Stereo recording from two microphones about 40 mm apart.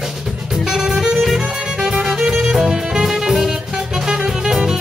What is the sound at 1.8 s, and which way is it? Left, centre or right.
Music, centre.